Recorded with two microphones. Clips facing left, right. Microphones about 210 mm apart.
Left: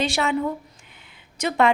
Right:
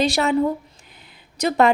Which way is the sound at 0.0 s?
40° right (ahead or behind).